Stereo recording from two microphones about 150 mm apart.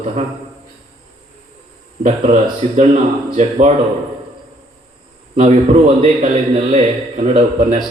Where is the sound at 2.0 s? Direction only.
50° right (ahead or behind).